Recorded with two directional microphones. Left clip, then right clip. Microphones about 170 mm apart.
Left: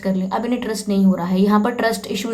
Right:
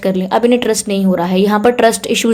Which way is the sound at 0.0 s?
40° right (ahead or behind).